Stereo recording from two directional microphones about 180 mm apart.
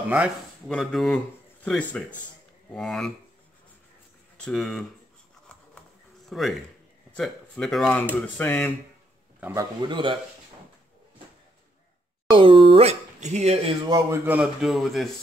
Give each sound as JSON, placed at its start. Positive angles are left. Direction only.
{"t": 0.7, "sound": "speech", "side_deg": 0}
{"t": 4.4, "sound": "speech", "side_deg": 0}
{"t": 6.2, "sound": "a man's voice", "side_deg": 0}
{"t": 9.4, "sound": "a man's voice", "side_deg": -15}
{"t": 9.8, "sound": "a man's voice", "side_deg": -25}
{"t": 12.3, "sound": "speech", "side_deg": -30}
{"t": 13.8, "sound": "speech", "side_deg": -20}